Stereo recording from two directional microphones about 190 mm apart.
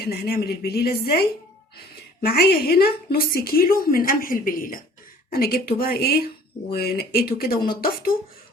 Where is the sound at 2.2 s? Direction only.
55° left (ahead or behind).